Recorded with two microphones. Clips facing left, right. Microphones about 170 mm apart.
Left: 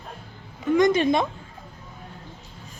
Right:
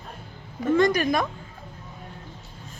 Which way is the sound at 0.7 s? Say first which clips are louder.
Left 3 dB; 20° left (ahead or behind).